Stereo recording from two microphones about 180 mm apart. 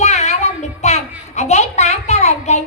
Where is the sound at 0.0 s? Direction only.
40° left (ahead or behind).